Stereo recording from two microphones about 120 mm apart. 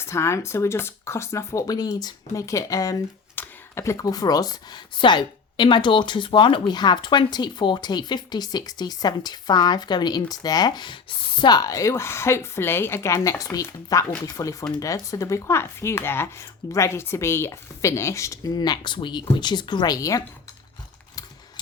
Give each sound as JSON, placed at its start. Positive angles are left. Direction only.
{"t": 0.0, "sound": "speech", "side_deg": 20}